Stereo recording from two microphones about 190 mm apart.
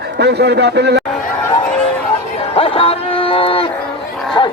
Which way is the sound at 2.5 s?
30° left (ahead or behind).